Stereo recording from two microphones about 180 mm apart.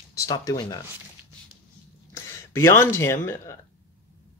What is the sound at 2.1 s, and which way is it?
Speech, 15° left (ahead or behind).